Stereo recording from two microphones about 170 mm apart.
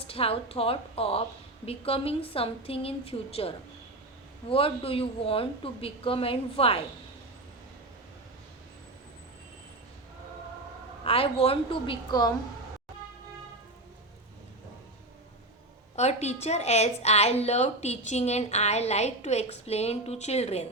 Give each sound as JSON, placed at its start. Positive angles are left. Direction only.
{"t": 0.0, "sound": "speech", "side_deg": 35}
{"t": 11.0, "sound": "speech", "side_deg": 35}
{"t": 16.0, "sound": "speech", "side_deg": 40}